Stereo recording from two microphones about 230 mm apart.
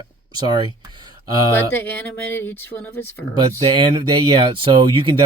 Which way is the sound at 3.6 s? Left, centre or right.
Right.